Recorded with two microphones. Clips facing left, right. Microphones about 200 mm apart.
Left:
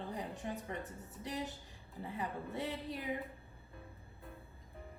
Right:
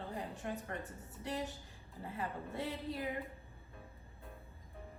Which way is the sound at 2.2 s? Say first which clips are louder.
Even; 20° left (ahead or behind).